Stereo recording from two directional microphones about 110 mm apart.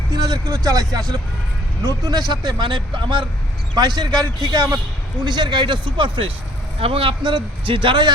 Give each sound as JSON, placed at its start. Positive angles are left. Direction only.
{"t": 0.2, "sound": "a man's voice", "side_deg": -35}